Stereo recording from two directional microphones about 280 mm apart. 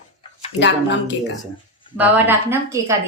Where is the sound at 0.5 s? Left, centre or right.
Left.